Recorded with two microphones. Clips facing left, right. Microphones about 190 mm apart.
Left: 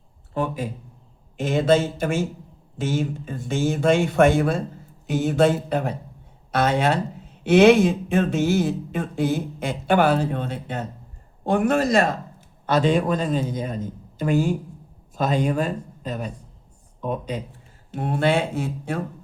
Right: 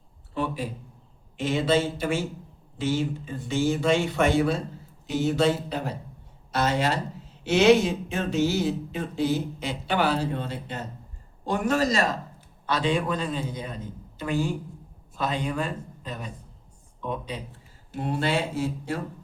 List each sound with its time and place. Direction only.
0.3 s speech: 45° left (ahead or behind)
17.9 s speech: 55° left (ahead or behind)